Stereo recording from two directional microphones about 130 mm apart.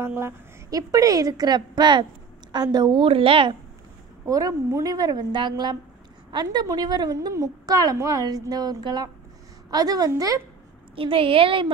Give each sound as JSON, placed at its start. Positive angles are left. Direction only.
{"t": 0.0, "sound": "a woman's voice", "side_deg": -20}
{"t": 4.3, "sound": "a woman's voice", "side_deg": -25}
{"t": 11.0, "sound": "a woman's voice", "side_deg": -45}